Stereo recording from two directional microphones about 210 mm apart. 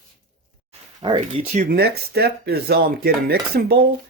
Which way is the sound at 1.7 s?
50° right (ahead or behind).